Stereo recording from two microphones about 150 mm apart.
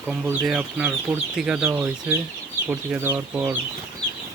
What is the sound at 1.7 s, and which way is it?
Speech, 15° right (ahead or behind).